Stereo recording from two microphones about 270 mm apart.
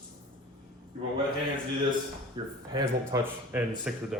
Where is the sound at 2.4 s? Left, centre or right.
Centre.